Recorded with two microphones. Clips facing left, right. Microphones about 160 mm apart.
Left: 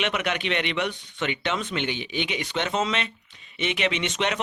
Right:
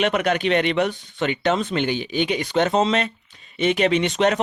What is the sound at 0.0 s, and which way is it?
Speech, 40° right (ahead or behind).